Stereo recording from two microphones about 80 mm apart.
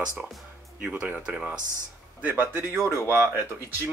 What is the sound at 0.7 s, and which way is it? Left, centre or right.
Speech, centre.